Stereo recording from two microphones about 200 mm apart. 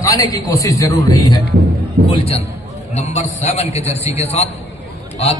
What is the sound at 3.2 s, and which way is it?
A man's voice, 30° left (ahead or behind).